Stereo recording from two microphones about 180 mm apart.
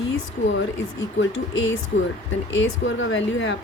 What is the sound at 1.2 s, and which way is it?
Speech, 90° left.